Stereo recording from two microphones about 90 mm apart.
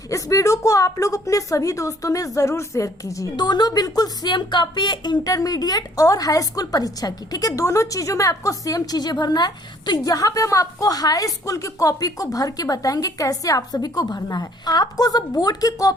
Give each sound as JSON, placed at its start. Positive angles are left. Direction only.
{"t": 0.1, "sound": "a woman's voice", "side_deg": 35}
{"t": 3.3, "sound": "a woman's voice", "side_deg": 50}
{"t": 5.3, "sound": "a woman's voice", "side_deg": 45}